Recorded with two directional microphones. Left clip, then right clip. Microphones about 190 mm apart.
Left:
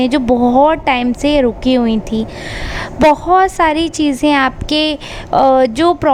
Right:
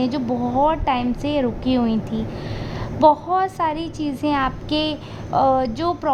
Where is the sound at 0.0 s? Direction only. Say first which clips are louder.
Left 10 dB; 40° left (ahead or behind).